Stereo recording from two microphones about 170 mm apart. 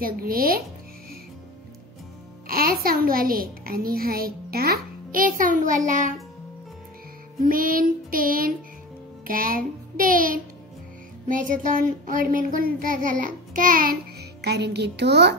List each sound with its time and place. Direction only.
0.0 s child singing: 60° right (ahead or behind)
2.4 s a child's voice: 60° right (ahead or behind)
7.4 s child singing: 55° right (ahead or behind)
14.4 s a woman's voice: 75° right (ahead or behind)